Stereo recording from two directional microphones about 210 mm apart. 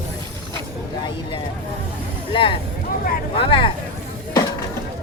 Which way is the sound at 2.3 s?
25° left (ahead or behind).